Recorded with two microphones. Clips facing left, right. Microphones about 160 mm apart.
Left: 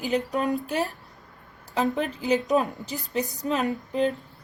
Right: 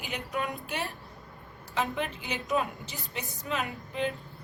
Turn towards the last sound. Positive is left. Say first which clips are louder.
# left 8 dB
turn(degrees=40)  # may be behind; listen again after turning